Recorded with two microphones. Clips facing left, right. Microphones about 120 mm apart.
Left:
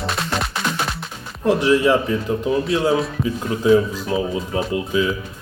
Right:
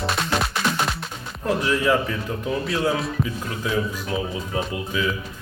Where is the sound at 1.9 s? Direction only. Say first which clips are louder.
Left 4 dB; 25° left (ahead or behind).